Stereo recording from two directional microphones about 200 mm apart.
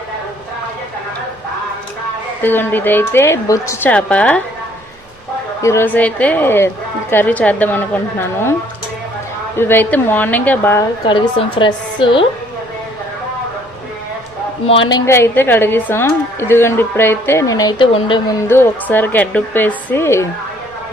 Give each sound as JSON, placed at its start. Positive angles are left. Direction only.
{"t": 2.4, "sound": "a woman's voice", "side_deg": 10}
{"t": 5.6, "sound": "a woman's voice", "side_deg": 10}
{"t": 9.6, "sound": "a woman's voice", "side_deg": 10}
{"t": 11.0, "sound": "a woman's voice", "side_deg": 25}
{"t": 14.7, "sound": "a woman's voice", "side_deg": 25}
{"t": 18.4, "sound": "a woman's voice", "side_deg": 10}